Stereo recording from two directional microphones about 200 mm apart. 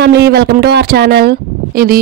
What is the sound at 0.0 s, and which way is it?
Speech, 55° right (ahead or behind).